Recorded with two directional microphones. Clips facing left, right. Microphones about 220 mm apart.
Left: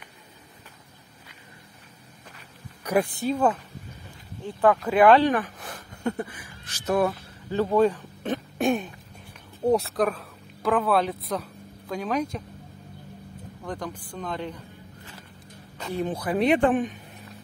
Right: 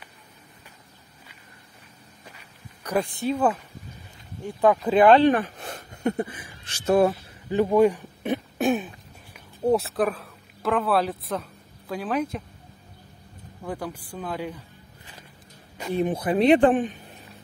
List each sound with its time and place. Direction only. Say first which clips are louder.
2.8 s speech: left 2 dB; 10° left (ahead or behind)
3.3 s speech: right 3 dB; 5° right (ahead or behind)
4.8 s speech: right 2 dB; 25° right (ahead or behind)
7.5 s speech: right 2 dB; 15° right (ahead or behind)
8.5 s throat clearing: even; centre (ahead or behind)
9.7 s speech: even; centre (ahead or behind)
13.7 s speech: right 2 dB; 10° right (ahead or behind)
15.8 s speech: right 4 dB; 15° right (ahead or behind); by 16.9 s 30° right (ahead or behind)